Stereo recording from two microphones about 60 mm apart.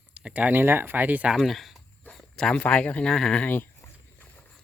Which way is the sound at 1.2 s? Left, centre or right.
Centre.